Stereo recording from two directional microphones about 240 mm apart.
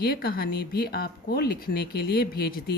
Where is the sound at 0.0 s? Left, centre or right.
Left.